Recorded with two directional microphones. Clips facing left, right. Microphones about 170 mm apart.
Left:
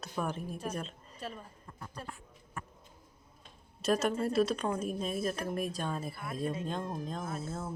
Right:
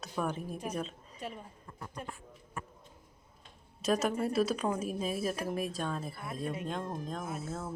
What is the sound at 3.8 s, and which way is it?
A woman's voice, centre (ahead or behind).